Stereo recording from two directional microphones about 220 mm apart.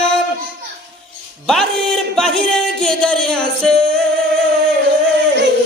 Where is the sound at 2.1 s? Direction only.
Centre (ahead or behind).